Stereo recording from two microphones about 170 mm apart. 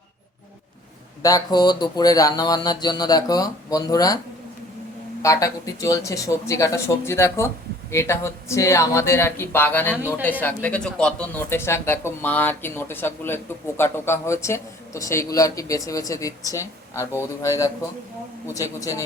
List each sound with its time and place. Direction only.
1.2 s speech: 20° left (ahead or behind)
5.2 s speech: 20° left (ahead or behind)
18.8 s speech: 20° left (ahead or behind)